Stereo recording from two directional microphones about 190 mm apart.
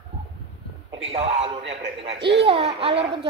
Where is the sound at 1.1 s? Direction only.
30° right (ahead or behind).